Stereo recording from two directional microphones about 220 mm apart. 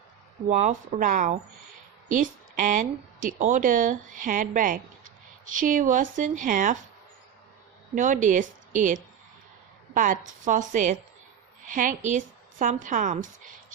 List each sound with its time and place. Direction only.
0.4 s a woman's voice: 30° right (ahead or behind)
7.9 s a woman's voice: 35° right (ahead or behind)